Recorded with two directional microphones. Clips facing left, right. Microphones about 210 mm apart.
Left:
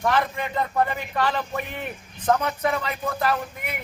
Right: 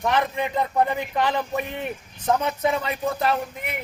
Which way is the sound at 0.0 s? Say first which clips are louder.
Right 1 dB; 20° right (ahead or behind).